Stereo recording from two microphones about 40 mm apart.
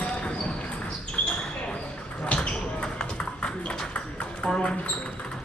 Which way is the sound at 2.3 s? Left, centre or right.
Left.